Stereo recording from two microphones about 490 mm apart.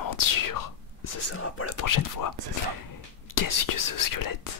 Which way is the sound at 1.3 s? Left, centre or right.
Left.